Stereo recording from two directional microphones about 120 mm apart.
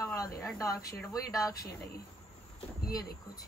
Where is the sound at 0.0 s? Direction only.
30° left (ahead or behind).